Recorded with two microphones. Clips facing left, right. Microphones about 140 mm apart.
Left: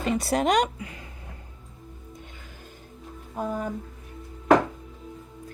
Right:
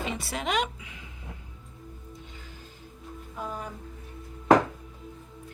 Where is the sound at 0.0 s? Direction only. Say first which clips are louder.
Left 8 dB; 45° left (ahead or behind).